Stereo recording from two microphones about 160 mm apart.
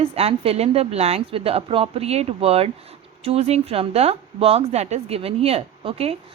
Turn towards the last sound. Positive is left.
turn(degrees=-40)  # may be behind; listen again after turning